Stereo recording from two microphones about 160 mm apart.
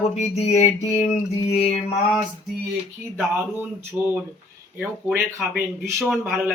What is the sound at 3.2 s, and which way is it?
Speech, 10° right (ahead or behind).